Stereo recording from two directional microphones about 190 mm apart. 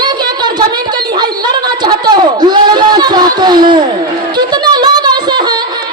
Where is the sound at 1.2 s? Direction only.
20° right (ahead or behind).